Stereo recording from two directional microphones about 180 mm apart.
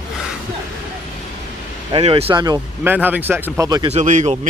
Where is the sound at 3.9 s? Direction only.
40° right (ahead or behind).